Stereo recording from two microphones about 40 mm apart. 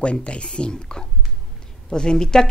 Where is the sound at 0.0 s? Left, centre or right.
Left.